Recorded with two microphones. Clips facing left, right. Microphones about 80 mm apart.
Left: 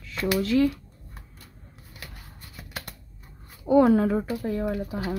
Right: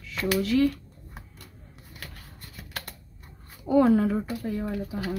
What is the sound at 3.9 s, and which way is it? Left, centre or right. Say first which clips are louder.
Speech: left 1 dB; left.